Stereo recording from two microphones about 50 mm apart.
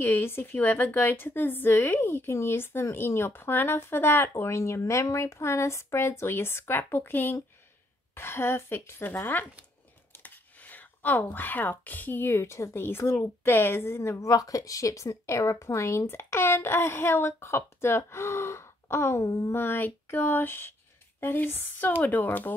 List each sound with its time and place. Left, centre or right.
0.0 s a woman's voice: left
4.3 s a woman's voice: left
9.1 s speech: left
12.8 s speech: left
14.8 s speech: left
16.1 s speech: left
19.5 s a woman's voice: left